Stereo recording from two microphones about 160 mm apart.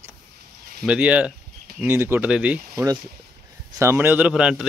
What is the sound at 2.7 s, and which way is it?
Speech, 20° right (ahead or behind).